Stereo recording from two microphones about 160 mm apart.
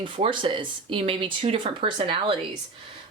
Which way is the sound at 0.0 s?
35° right (ahead or behind).